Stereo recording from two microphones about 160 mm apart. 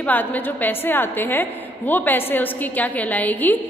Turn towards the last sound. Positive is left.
turn(degrees=10)  # may be behind; listen again after turning